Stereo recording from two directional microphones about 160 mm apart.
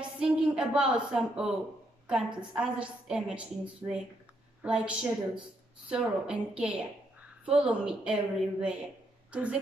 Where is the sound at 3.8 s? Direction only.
20° right (ahead or behind).